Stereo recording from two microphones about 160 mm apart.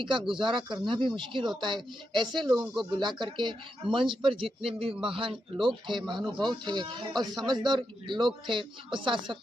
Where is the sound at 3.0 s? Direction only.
30° right (ahead or behind).